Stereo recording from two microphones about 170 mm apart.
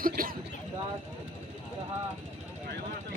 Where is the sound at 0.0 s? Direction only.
55° right (ahead or behind).